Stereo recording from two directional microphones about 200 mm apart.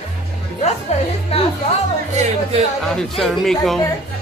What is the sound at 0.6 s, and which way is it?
Music, 35° left (ahead or behind).